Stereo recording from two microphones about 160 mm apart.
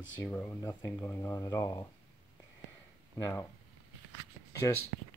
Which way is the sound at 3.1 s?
15° left (ahead or behind).